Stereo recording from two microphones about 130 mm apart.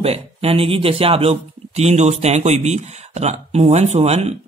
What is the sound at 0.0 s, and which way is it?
Speech, 50° right (ahead or behind).